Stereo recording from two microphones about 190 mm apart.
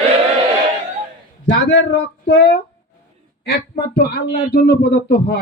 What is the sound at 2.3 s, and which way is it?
Speech, 65° left (ahead or behind).